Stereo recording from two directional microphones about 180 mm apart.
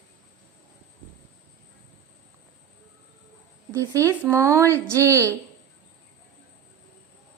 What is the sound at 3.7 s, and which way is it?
Speech, 15° right (ahead or behind).